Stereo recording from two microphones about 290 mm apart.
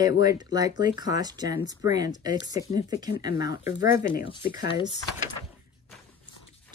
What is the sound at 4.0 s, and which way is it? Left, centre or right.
Speech, left.